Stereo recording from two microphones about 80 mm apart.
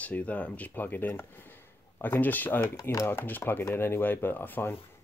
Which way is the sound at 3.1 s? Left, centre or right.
Left.